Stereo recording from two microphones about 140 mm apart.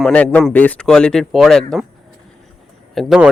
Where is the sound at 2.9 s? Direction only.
5° right (ahead or behind).